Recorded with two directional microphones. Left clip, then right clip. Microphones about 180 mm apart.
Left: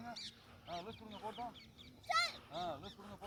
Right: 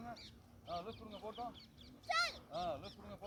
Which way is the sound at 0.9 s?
75° right (ahead or behind).